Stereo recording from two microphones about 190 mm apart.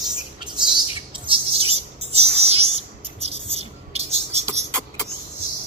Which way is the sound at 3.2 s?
30° right (ahead or behind).